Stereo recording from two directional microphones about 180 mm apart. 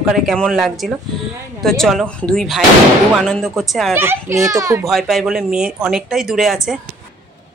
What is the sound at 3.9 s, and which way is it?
Speech, 15° right (ahead or behind).